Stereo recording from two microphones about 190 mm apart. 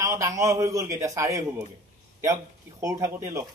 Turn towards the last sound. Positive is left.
turn(degrees=-15)  # may be behind; listen again after turning